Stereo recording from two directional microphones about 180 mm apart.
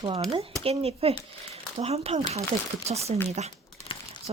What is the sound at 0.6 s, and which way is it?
Speech, 35° right (ahead or behind).